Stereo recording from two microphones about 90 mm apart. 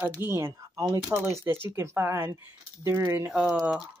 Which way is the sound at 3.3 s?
10° right (ahead or behind).